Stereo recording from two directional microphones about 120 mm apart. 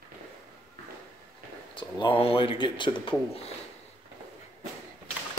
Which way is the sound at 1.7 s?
40° left (ahead or behind).